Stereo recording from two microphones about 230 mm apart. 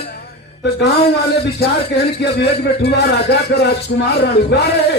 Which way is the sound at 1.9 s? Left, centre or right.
Left.